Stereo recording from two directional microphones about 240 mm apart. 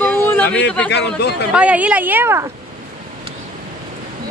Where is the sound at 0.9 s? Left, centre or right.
Left.